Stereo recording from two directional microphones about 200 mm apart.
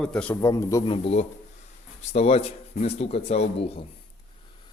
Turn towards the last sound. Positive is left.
turn(degrees=30)  # may be behind; listen again after turning